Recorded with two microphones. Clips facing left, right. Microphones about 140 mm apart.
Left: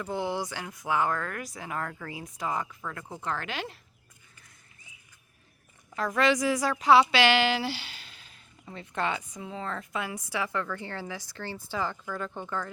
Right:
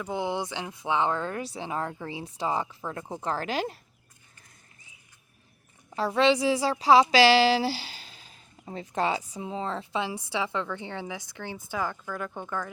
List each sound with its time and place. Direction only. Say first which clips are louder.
0.0 s speech: right 1 dB; 15° right (ahead or behind); by 3.8 s 40° right (ahead or behind)
6.0 s a woman's voice: right 3 dB; 30° right (ahead or behind); by 12.7 s 10° right (ahead or behind)